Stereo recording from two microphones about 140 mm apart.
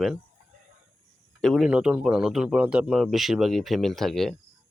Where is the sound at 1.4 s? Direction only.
Centre (ahead or behind).